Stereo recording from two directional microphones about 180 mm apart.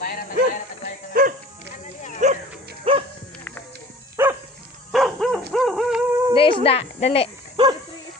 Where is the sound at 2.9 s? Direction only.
30° right (ahead or behind).